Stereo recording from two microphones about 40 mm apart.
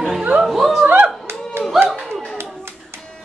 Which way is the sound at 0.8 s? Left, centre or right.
Right.